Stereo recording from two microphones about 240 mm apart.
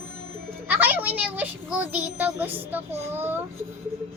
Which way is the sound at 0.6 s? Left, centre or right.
Centre.